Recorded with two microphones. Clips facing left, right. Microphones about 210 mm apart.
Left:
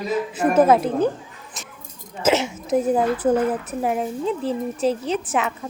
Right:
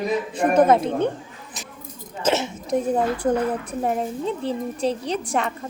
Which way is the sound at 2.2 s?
5° left (ahead or behind).